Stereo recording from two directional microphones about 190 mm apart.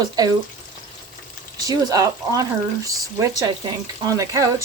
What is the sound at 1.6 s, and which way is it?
Speech, 20° right (ahead or behind).